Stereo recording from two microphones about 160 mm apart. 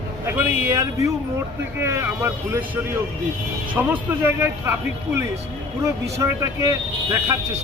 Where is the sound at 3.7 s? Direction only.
10° right (ahead or behind).